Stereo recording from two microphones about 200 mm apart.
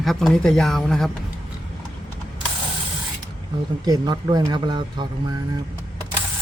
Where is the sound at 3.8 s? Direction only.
20° right (ahead or behind).